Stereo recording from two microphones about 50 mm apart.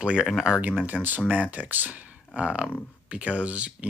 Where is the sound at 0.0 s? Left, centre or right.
Centre.